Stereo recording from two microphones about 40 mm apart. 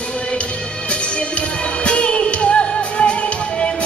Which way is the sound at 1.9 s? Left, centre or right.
Left.